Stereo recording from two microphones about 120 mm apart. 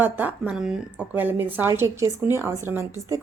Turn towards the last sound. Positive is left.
turn(degrees=-20)  # may be behind; listen again after turning